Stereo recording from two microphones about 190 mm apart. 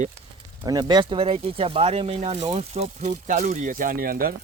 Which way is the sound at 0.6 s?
20° right (ahead or behind).